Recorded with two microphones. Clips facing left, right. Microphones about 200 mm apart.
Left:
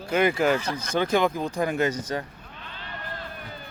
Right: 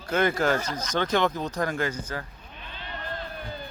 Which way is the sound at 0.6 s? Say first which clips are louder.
Left 2 dB; 60° left (ahead or behind).